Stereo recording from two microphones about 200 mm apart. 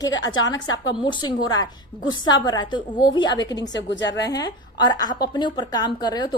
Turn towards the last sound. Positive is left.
turn(degrees=20)  # may be behind; listen again after turning